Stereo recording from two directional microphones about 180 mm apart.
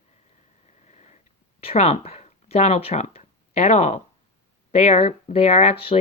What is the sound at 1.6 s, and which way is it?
Speech, 35° left (ahead or behind).